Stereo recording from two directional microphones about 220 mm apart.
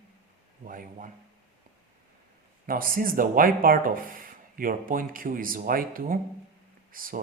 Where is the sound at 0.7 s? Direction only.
40° right (ahead or behind).